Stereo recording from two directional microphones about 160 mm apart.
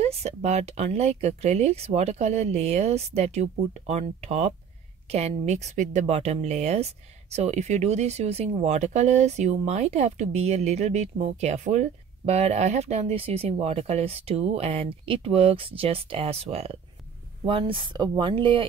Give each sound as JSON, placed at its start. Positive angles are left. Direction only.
{"t": 0.0, "sound": "speech", "side_deg": -40}